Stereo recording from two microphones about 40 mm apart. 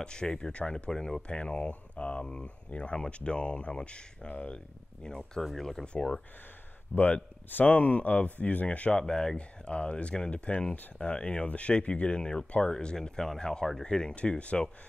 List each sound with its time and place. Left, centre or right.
0.0 s speech: left
5.0 s speech: centre
5.4 s speech: centre
5.9 s speech: centre
7.6 s speech: left
8.9 s speech: centre
9.7 s speech: left
14.1 s speech: left